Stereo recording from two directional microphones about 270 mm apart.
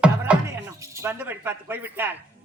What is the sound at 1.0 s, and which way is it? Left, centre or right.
Speech, centre.